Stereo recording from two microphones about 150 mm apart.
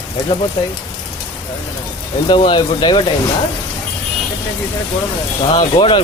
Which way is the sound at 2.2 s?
35° left (ahead or behind).